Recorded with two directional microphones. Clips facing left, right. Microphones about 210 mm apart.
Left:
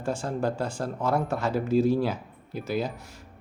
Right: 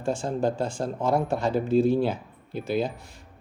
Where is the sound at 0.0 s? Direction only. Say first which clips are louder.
Right 2 dB; 25° right (ahead or behind).